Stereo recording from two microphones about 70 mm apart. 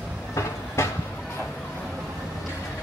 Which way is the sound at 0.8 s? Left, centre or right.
Left.